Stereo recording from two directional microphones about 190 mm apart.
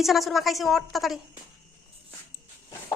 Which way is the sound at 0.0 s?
Centre (ahead or behind).